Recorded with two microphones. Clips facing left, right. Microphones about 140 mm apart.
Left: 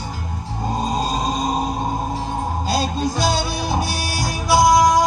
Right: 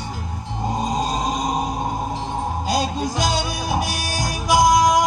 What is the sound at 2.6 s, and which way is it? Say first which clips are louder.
Music: left 1 dB; 15° right (ahead or behind).